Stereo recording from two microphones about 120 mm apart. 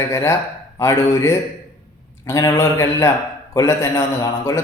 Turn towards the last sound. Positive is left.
turn(degrees=25)  # may be behind; listen again after turning